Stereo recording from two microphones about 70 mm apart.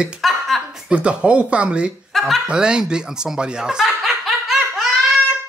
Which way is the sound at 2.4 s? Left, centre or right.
Centre.